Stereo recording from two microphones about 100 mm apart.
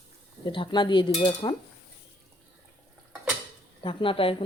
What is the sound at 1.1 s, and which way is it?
Dishes, 70° left (ahead or behind).